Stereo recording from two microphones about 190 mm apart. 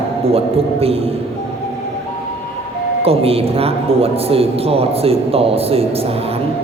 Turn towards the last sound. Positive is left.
turn(degrees=-30)  # may be behind; listen again after turning